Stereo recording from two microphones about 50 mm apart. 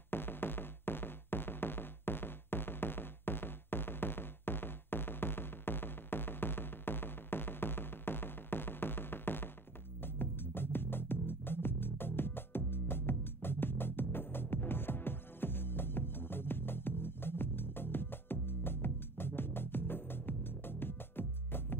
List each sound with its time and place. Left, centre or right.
0.1 s music: left